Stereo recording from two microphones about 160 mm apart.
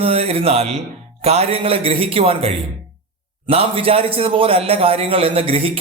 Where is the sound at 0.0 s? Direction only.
40° right (ahead or behind).